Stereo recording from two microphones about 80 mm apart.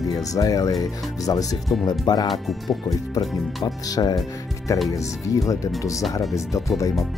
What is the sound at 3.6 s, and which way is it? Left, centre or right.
Speech, left.